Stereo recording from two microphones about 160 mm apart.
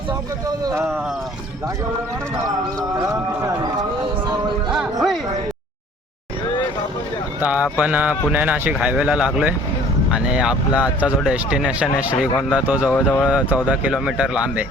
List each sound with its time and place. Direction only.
0.4 s speech: 20° right (ahead or behind)
4.7 s speech: centre (ahead or behind)
7.4 s a man's voice: 10° right (ahead or behind)
12.9 s speech: 10° left (ahead or behind)
13.2 s a man's voice: 5° right (ahead or behind)